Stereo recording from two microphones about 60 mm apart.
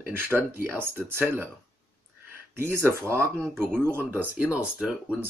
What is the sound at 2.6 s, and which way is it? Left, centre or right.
Speech, right.